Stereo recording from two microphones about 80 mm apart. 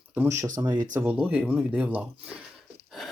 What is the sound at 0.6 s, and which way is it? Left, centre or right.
Speech, right.